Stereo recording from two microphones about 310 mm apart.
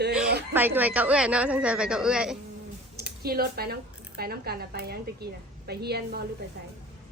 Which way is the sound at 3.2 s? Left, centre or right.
Right.